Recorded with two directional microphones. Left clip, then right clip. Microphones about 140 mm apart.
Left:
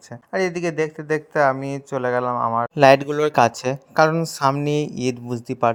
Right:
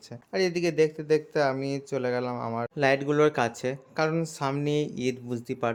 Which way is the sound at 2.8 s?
55° left (ahead or behind).